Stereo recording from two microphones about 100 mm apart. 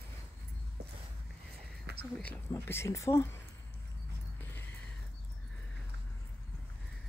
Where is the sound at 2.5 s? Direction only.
25° left (ahead or behind).